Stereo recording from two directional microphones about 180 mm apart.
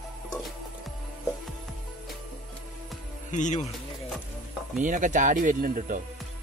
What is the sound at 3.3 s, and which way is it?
Speech, 40° left (ahead or behind).